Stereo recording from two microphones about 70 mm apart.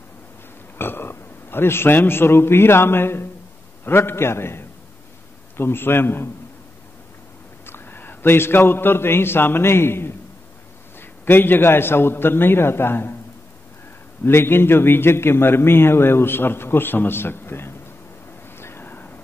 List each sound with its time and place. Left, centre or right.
0.7 s a man's voice: left
7.6 s a man's voice: left
14.2 s a man's voice: left
18.6 s vehicle: left